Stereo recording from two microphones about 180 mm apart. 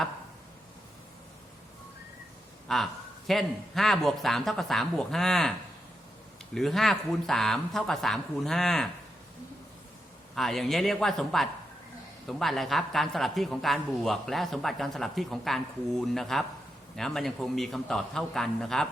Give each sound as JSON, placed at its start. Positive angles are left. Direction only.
{"t": 2.6, "sound": "a man's voice", "side_deg": 0}
{"t": 10.3, "sound": "a man's voice", "side_deg": 0}